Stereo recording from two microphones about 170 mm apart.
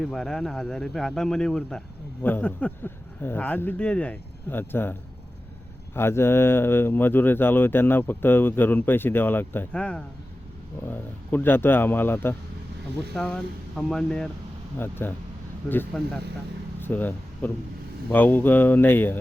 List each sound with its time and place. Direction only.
0.0 s speech: 5° left (ahead or behind)
16.8 s speech: 10° left (ahead or behind)